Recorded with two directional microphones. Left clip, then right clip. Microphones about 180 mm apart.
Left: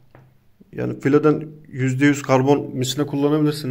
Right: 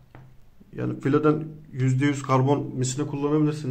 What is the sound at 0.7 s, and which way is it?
A man's voice, 20° left (ahead or behind).